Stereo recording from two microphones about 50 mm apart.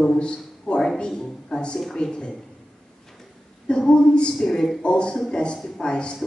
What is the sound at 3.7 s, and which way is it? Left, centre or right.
A man's voice, centre.